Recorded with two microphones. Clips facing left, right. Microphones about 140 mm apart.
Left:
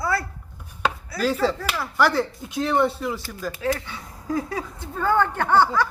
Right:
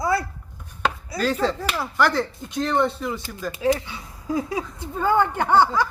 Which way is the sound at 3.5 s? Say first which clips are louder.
Right 5 dB; 15° right (ahead or behind).